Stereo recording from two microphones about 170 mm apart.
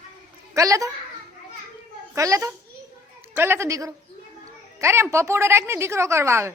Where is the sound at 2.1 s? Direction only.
20° right (ahead or behind).